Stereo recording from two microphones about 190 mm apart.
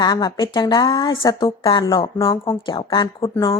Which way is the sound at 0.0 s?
25° left (ahead or behind).